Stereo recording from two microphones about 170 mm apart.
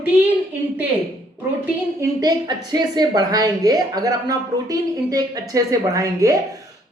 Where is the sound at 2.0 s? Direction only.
20° right (ahead or behind).